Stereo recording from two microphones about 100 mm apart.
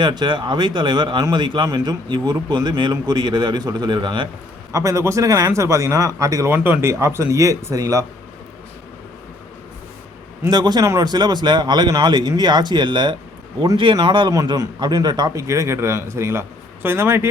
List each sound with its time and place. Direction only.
0.0 s speech: 50° right (ahead or behind)
4.7 s speech: 30° right (ahead or behind)
6.5 s speech: 20° right (ahead or behind)
10.5 s speech: 45° right (ahead or behind)
15.4 s a man's voice: 30° right (ahead or behind)